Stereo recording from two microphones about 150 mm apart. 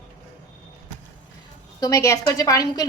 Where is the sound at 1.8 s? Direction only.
20° left (ahead or behind).